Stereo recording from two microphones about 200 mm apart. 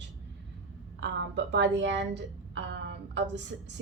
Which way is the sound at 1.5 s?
60° right (ahead or behind).